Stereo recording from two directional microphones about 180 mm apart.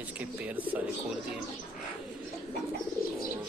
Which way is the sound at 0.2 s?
10° right (ahead or behind).